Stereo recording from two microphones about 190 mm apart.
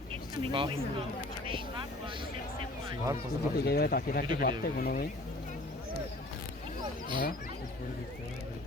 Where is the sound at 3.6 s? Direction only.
55° left (ahead or behind).